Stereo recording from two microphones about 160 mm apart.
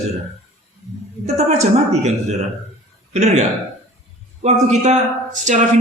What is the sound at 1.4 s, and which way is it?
A man's voice, 45° right (ahead or behind).